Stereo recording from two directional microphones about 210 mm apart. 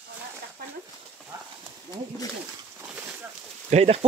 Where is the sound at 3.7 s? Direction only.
30° right (ahead or behind).